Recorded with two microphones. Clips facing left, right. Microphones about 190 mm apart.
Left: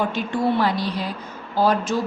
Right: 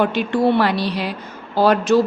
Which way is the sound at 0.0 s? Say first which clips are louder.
Right 5 dB; 75° right (ahead or behind).